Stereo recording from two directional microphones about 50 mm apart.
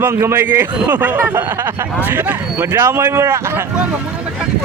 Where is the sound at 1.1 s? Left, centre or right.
Right.